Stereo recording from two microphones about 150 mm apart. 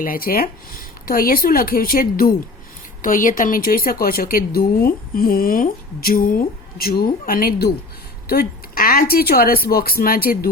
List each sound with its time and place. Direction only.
0.0 s speech: 70° left (ahead or behind)
3.0 s speech: 65° left (ahead or behind); by 10.5 s 85° left